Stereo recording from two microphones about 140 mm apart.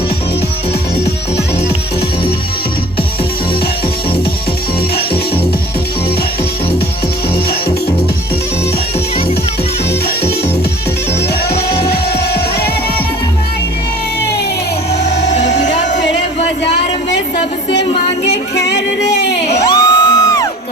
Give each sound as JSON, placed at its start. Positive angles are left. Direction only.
{"t": 19.5, "sound": "music", "side_deg": 30}